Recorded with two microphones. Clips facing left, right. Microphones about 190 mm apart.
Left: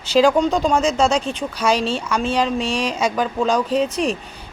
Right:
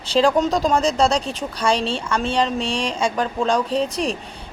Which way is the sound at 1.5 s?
30° right (ahead or behind).